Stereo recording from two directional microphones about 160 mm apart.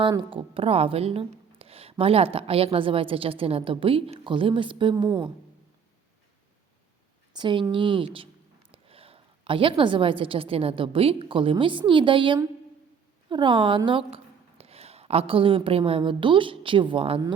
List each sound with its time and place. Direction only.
0.0 s a woman's voice: 30° right (ahead or behind)
7.3 s a woman's voice: 30° right (ahead or behind)